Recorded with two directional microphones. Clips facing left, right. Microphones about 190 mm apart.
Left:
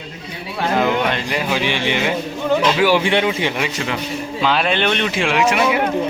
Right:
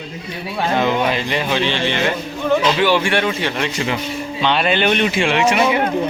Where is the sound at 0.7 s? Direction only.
Centre (ahead or behind).